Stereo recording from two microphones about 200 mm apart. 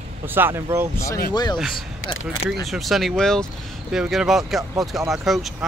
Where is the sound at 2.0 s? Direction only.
80° left.